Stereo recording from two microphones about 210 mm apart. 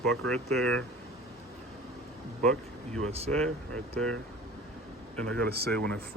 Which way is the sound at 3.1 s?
30° right (ahead or behind).